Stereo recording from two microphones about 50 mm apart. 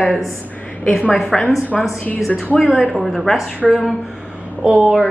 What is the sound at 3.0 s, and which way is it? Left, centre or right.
Speech, centre.